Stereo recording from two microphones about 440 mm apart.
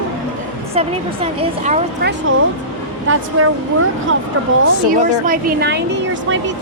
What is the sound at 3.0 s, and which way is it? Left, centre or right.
Speech, right.